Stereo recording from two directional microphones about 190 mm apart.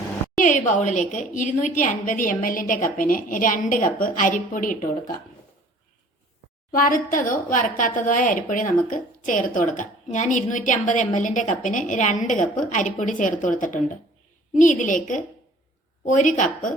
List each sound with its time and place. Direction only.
0.4 s a woman's voice: 40° left (ahead or behind)
6.7 s a woman's voice: 45° left (ahead or behind)